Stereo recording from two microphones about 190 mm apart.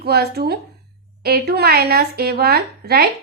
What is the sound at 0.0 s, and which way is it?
Speech, 55° right (ahead or behind).